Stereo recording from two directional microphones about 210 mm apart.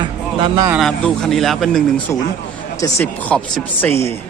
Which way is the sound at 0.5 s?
15° right (ahead or behind).